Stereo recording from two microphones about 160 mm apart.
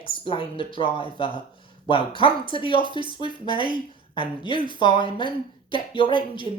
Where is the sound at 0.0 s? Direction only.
35° left (ahead or behind).